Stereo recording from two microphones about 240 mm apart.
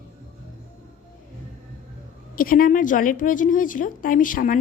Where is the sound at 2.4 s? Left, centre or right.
Left.